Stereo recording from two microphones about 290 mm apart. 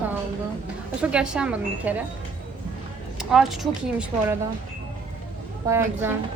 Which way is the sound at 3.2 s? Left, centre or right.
Centre.